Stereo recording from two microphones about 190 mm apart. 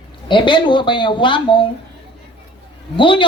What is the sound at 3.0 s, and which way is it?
Speech, 25° left (ahead or behind).